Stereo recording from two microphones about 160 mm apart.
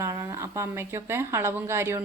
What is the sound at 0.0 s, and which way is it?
A woman's voice, 20° right (ahead or behind).